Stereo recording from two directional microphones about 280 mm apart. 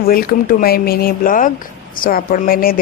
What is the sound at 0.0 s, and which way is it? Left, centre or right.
Speech, left.